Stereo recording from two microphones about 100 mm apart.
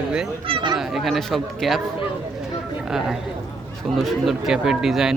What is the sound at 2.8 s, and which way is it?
Speech, 5° right (ahead or behind).